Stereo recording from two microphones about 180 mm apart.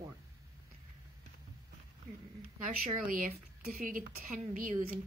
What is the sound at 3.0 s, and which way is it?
Speech, 50° right (ahead or behind).